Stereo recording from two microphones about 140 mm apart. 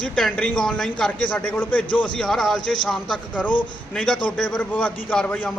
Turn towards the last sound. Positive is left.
turn(degrees=10)  # may be behind; listen again after turning